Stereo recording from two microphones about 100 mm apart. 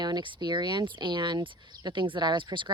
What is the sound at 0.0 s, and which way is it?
Speech, 50° right (ahead or behind).